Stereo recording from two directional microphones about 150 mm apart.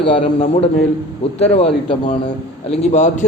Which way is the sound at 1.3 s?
45° left (ahead or behind).